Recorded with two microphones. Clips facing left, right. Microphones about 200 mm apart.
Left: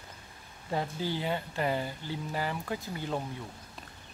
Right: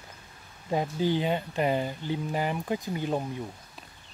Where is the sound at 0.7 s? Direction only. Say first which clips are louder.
Right 6 dB; 15° right (ahead or behind).